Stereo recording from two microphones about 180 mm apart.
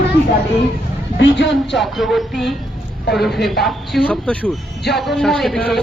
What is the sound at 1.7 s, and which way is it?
Speech, centre (ahead or behind).